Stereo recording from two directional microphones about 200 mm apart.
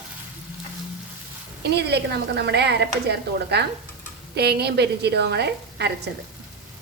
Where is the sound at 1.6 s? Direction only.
55° right (ahead or behind).